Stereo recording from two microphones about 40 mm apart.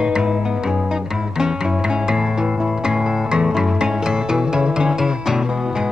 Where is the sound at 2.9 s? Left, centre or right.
Centre.